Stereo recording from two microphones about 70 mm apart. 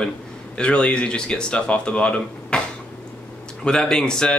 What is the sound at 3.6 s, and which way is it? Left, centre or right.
Speech, centre.